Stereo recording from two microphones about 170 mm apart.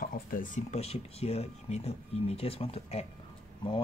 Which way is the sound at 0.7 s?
35° left (ahead or behind).